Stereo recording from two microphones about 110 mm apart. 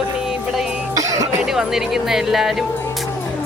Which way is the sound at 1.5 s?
5° right (ahead or behind).